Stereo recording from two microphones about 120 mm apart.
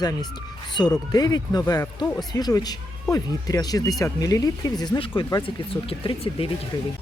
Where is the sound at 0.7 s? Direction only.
35° left (ahead or behind).